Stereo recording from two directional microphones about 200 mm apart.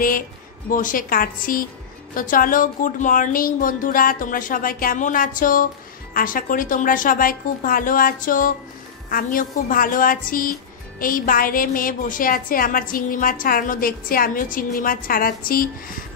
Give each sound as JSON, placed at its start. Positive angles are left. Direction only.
{"t": 0.7, "sound": "a woman's voice", "side_deg": 40}